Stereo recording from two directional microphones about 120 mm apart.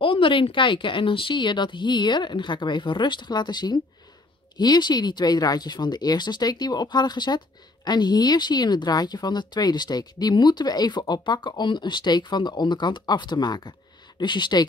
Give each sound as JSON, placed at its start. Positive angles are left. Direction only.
{"t": 0.0, "sound": "speech", "side_deg": 45}